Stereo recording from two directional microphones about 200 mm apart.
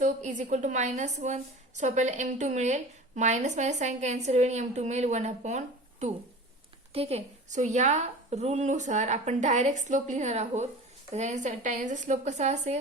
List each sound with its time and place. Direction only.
0.0 s a woman's voice: 40° right (ahead or behind)